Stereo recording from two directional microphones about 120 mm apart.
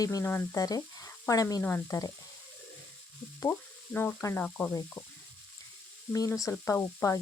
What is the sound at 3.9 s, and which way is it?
Speech, 20° left (ahead or behind).